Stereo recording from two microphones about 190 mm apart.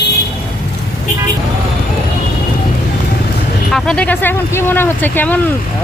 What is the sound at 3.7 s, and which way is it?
Speech, 5° left (ahead or behind).